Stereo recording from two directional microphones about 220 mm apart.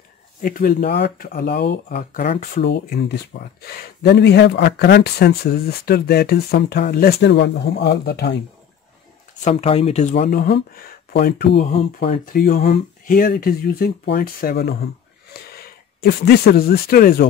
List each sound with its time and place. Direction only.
0.4 s speech: 40° left (ahead or behind)
9.4 s speech: 30° left (ahead or behind)
10.2 s speech: 45° left (ahead or behind)
11.7 s speech: 25° left (ahead or behind)
12.3 s speech: 45° left (ahead or behind)